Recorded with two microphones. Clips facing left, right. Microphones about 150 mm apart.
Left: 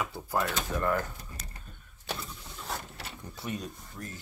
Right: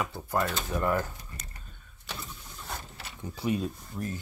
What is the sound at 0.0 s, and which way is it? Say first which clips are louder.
Speech: right 1 dB; 5° left (ahead or behind).